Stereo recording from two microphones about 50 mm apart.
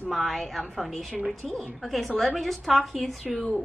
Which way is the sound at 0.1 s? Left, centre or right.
Centre.